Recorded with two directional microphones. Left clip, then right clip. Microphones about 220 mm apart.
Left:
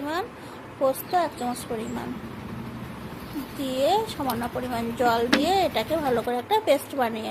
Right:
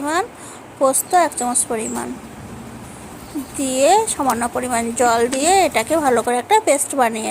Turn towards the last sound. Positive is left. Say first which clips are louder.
# right 9 dB
turn(degrees=-25)  # may be behind; listen again after turning